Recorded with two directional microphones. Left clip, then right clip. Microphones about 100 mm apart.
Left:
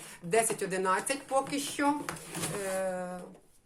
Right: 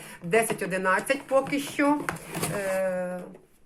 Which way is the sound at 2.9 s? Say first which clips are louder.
Right 7 dB; 15° left (ahead or behind).